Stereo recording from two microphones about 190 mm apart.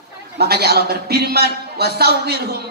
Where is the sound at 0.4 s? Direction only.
55° right (ahead or behind).